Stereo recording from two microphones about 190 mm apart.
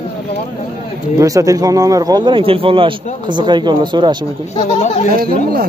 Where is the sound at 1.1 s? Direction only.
15° right (ahead or behind).